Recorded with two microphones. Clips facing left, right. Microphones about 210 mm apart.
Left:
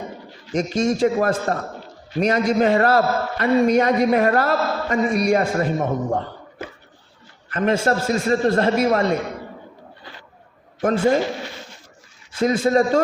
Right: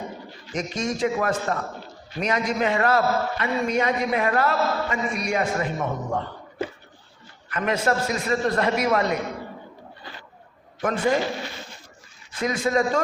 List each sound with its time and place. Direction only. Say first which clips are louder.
0.5 s a man's voice: left 7 dB; 30° left (ahead or behind)
7.5 s a man's voice: left 4 dB; 30° left (ahead or behind)
10.8 s a man's voice: left 5 dB; 30° left (ahead or behind)
12.4 s a man's voice: left 5 dB; 30° left (ahead or behind)